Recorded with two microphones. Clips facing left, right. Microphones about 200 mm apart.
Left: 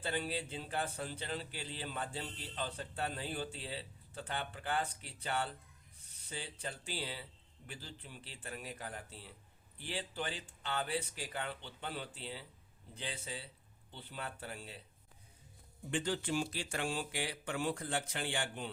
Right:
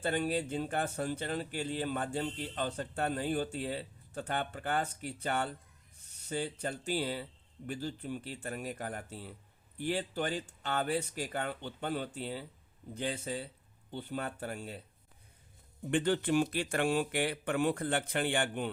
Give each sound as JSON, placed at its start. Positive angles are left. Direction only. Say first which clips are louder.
{"t": 0.0, "sound": "a man's voice", "louder": "right 7 dB", "side_deg": -50}
{"t": 15.9, "sound": "speech", "louder": "right 7 dB", "side_deg": -60}